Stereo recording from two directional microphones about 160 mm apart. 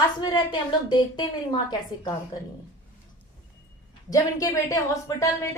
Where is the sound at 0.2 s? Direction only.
25° left (ahead or behind).